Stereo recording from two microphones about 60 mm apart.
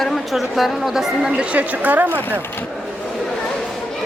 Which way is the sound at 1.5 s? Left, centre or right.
Right.